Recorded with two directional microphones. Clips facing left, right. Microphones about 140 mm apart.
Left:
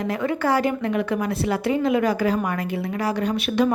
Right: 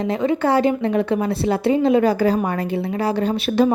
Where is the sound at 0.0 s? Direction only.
25° right (ahead or behind).